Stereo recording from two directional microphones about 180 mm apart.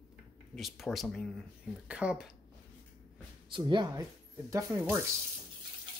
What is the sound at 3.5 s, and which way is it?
Speech, 25° right (ahead or behind).